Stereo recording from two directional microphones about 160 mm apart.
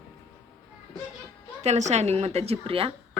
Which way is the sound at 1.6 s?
45° right (ahead or behind).